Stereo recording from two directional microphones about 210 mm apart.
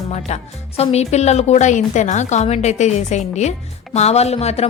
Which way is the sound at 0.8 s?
30° left (ahead or behind).